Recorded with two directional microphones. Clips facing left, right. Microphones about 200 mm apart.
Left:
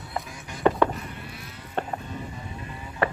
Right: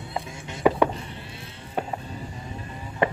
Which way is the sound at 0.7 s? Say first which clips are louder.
Right 1 dB; 10° right (ahead or behind).